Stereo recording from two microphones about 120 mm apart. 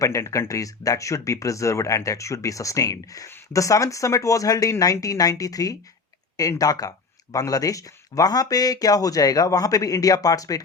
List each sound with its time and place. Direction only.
0.0 s speech: 25° left (ahead or behind)